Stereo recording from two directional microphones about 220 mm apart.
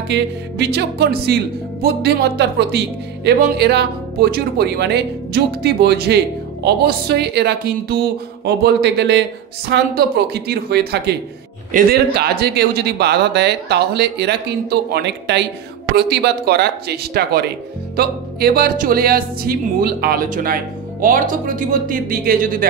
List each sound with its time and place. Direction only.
0.1 s speech: 50° right (ahead or behind)